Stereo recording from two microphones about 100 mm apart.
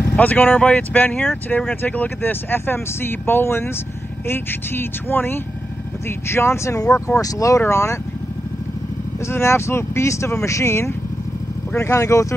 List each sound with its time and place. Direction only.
0.1 s speech: 15° left (ahead or behind)
9.2 s speech: 25° left (ahead or behind)